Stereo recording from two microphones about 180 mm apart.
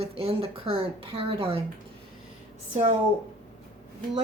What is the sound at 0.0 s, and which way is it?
Speech, 35° right (ahead or behind).